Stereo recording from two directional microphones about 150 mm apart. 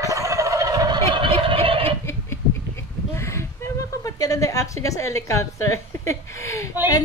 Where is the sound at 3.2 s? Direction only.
20° left (ahead or behind).